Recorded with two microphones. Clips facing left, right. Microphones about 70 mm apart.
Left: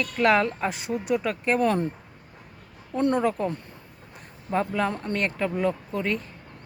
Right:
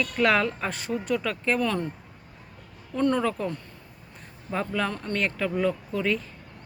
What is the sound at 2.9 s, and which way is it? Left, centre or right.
Speech, left.